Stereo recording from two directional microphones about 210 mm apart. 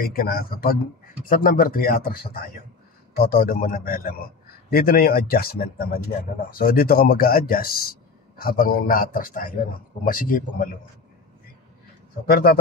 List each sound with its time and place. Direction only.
0.0 s speech: 45° left (ahead or behind)
12.3 s speech: 45° left (ahead or behind)